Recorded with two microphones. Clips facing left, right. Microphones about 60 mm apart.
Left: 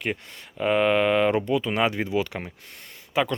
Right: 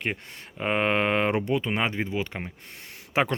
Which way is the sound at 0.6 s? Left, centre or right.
Right.